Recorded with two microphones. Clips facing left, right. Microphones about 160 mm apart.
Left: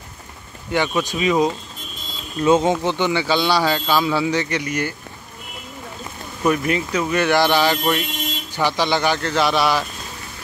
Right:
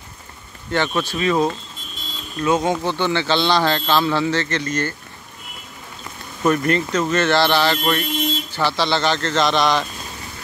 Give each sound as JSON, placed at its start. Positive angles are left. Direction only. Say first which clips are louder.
{"t": 0.7, "sound": "a man's voice", "louder": "left 1 dB", "side_deg": 10}
{"t": 2.4, "sound": "a man's voice", "louder": "left 3 dB", "side_deg": 25}
{"t": 6.4, "sound": "a man's voice", "louder": "right 1 dB", "side_deg": 5}